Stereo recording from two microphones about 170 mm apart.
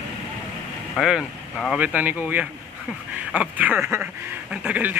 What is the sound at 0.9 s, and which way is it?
A man's voice, centre (ahead or behind).